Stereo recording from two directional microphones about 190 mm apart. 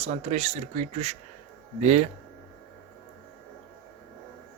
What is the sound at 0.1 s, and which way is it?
Speech, 35° right (ahead or behind).